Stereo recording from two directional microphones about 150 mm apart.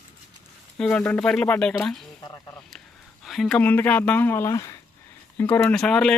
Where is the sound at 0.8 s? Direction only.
10° left (ahead or behind).